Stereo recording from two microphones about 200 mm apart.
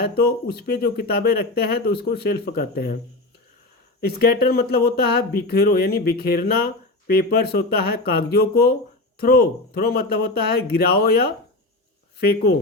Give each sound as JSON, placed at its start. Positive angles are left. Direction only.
{"t": 0.0, "sound": "speech", "side_deg": 50}
{"t": 4.0, "sound": "speech", "side_deg": 50}